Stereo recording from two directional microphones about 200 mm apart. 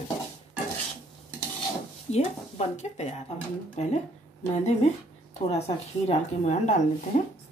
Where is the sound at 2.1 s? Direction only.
35° left (ahead or behind).